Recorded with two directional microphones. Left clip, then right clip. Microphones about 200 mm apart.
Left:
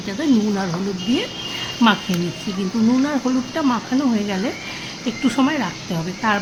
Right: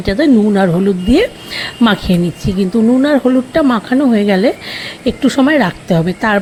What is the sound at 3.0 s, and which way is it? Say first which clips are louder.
Speech: right 9 dB; 30° right (ahead or behind).